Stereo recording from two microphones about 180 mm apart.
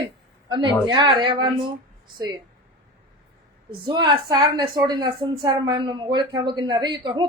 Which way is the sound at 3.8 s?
25° right (ahead or behind).